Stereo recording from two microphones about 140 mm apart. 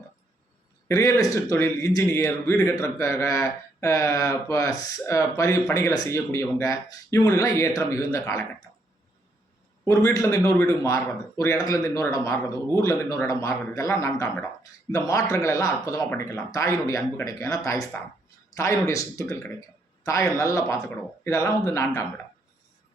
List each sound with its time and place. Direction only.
0.9 s a man's voice: 25° left (ahead or behind)
9.8 s a man's voice: 25° left (ahead or behind)